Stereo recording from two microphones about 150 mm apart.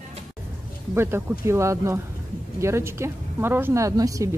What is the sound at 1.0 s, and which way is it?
Speech, 15° right (ahead or behind).